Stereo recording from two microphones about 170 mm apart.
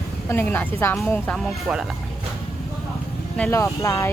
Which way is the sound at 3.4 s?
15° left (ahead or behind).